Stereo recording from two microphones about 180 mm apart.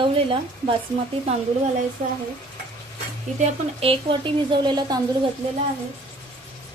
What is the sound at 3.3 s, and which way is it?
A woman's voice, 30° right (ahead or behind).